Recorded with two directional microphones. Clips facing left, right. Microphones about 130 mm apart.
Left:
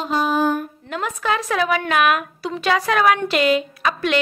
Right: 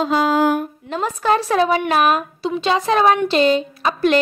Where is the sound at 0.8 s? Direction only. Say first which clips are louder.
Right 4 dB; 30° right (ahead or behind).